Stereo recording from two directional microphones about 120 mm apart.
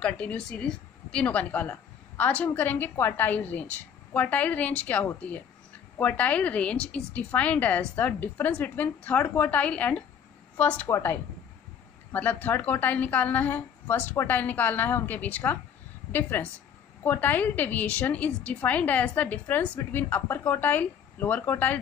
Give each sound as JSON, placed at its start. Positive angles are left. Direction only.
{"t": 0.0, "sound": "a woman's voice", "side_deg": 10}